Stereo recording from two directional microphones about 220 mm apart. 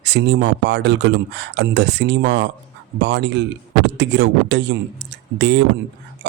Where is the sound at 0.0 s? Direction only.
50° right (ahead or behind).